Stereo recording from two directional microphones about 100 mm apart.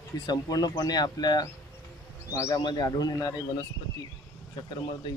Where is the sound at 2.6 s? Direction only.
45° left (ahead or behind).